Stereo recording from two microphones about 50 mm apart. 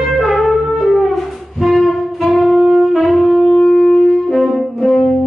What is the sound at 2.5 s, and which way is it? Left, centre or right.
Wind instrument, centre.